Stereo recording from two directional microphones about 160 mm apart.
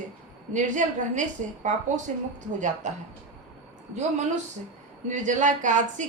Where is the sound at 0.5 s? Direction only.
50° right (ahead or behind).